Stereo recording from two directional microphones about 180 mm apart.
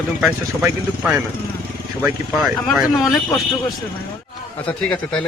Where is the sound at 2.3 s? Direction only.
Centre (ahead or behind).